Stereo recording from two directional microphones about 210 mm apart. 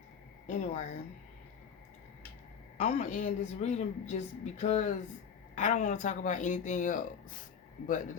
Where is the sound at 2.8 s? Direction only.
35° left (ahead or behind).